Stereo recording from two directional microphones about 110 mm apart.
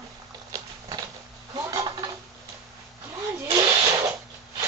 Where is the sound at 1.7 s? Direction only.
35° right (ahead or behind).